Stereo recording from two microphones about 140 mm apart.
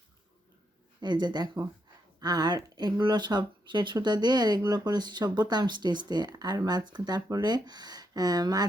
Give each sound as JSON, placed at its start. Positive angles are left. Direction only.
{"t": 1.0, "sound": "speech", "side_deg": -30}